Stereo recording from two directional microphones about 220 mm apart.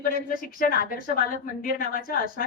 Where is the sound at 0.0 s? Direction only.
40° left (ahead or behind).